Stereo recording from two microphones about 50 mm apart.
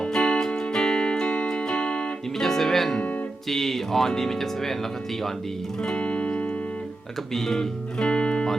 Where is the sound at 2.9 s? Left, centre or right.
Left.